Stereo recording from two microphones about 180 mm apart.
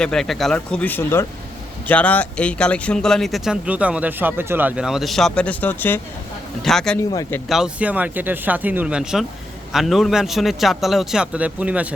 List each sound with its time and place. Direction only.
0.0 s speech: 5° left (ahead or behind)
7.1 s speech: 15° left (ahead or behind)
7.4 s speech: centre (ahead or behind)